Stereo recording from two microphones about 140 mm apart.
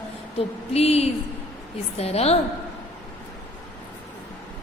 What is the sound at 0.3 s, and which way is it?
A woman's voice, 45° left (ahead or behind).